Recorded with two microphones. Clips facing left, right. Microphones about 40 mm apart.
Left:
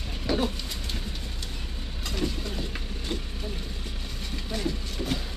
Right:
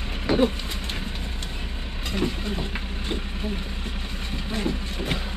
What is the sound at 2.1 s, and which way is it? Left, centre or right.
Vehicle, right.